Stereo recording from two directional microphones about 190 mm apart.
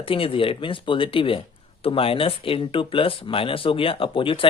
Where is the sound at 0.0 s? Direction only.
30° left (ahead or behind).